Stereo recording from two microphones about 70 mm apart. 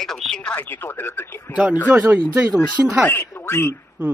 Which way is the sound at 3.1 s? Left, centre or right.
Left.